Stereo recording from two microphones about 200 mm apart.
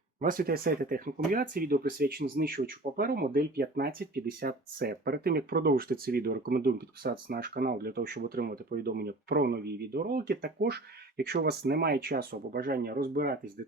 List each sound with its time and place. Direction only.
0.2 s speech: 45° right (ahead or behind)